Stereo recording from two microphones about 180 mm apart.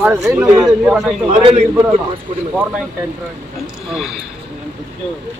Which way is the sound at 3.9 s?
Centre (ahead or behind).